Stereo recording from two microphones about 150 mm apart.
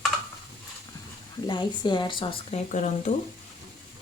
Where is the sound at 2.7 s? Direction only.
55° left (ahead or behind).